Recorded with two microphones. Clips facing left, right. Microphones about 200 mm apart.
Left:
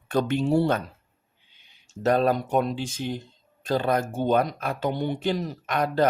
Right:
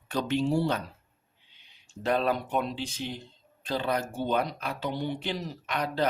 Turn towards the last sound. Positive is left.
turn(degrees=50)  # may be behind; listen again after turning